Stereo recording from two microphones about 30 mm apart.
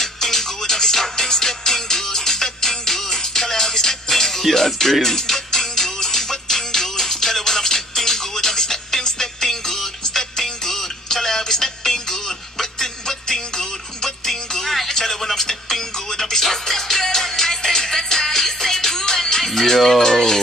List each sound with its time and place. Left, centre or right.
0.0 s music: centre
14.9 s a sound: centre
15.2 s music: centre